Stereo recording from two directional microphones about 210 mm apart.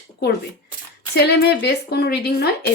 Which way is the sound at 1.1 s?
50° left (ahead or behind).